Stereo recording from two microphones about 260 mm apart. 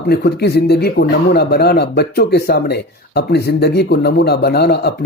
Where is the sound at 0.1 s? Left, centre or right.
Left.